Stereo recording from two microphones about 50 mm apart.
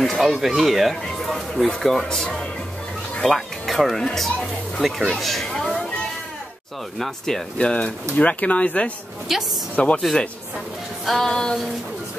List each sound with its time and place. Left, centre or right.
0.0 s speech: centre
2.0 s music: centre
3.2 s speech: centre
7.0 s music: centre
7.5 s speech: left
9.3 s speech: centre
9.8 s speech: left
11.1 s music: centre